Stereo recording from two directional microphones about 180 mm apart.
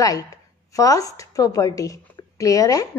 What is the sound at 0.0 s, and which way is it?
A woman's voice, 20° left (ahead or behind).